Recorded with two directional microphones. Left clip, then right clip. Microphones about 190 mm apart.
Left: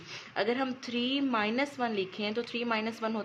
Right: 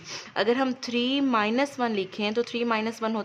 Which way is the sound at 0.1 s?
25° right (ahead or behind).